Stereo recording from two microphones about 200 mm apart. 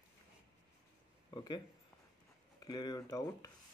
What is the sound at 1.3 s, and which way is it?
Speech, 20° left (ahead or behind).